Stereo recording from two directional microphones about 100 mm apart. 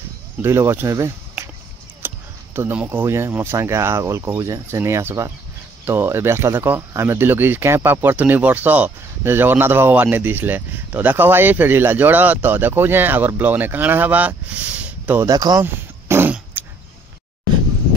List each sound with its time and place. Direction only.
0.4 s speech: 25° right (ahead or behind)
15.2 s speech: 40° right (ahead or behind)
15.6 s dog: 20° right (ahead or behind)